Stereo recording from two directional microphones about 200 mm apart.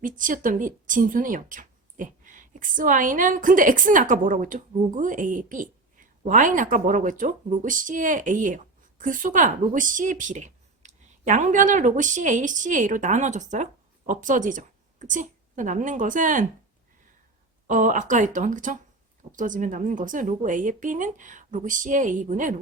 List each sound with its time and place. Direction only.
0.0 s a woman's voice: 40° right (ahead or behind)
17.7 s a woman's voice: 40° right (ahead or behind)